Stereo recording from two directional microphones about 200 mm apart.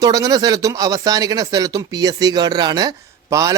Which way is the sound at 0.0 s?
20° right (ahead or behind).